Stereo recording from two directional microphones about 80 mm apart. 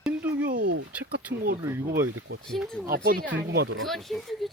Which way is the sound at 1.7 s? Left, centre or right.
Right.